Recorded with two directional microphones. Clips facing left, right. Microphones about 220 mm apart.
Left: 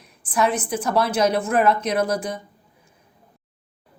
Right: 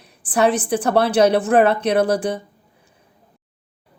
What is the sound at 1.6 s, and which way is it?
Speech, 65° right (ahead or behind).